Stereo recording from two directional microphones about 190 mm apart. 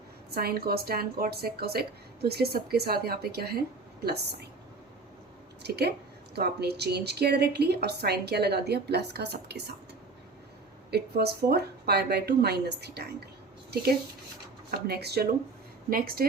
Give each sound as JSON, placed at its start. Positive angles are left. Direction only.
{"t": 0.3, "sound": "a woman's voice", "side_deg": -55}
{"t": 5.6, "sound": "a woman's voice", "side_deg": -60}
{"t": 10.9, "sound": "a woman's voice", "side_deg": -60}
{"t": 14.7, "sound": "a woman's voice", "side_deg": -55}